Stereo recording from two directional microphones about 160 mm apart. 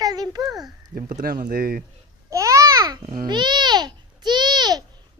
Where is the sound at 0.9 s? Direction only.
65° right (ahead or behind).